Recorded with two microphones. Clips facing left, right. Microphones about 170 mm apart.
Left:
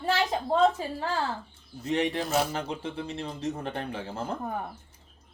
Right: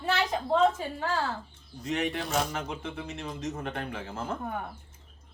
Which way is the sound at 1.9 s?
30° left (ahead or behind).